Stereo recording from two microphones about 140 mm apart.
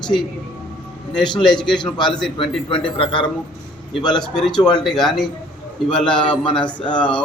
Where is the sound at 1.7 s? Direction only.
30° left (ahead or behind).